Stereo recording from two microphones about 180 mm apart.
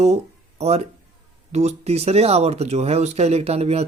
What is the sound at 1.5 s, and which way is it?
Speech, 35° right (ahead or behind).